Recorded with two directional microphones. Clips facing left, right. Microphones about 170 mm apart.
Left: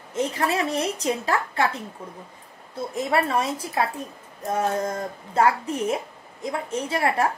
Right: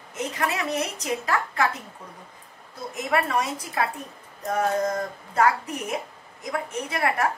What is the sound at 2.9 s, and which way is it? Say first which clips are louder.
A woman's voice: left 2 dB; 30° left (ahead or behind).